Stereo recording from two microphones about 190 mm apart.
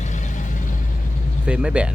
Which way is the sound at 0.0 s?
40° left (ahead or behind).